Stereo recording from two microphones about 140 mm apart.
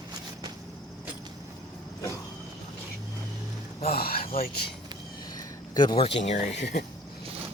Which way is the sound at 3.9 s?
90° left.